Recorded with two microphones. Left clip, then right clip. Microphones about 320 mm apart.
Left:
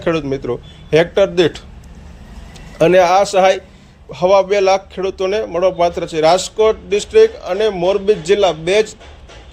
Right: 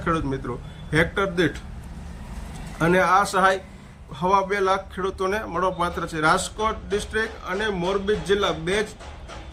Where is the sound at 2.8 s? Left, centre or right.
Centre.